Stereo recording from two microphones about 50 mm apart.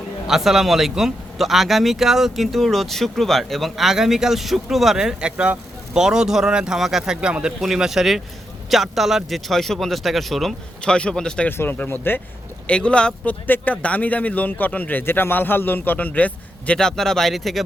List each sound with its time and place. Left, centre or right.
0.3 s speech: centre
6.7 s speech: centre
7.0 s speech: centre
7.6 s speech: centre
10.8 s speech: centre
11.5 s speech: left
12.6 s speech: left
13.2 s speech: left
15.0 s speech: left
16.7 s speech: centre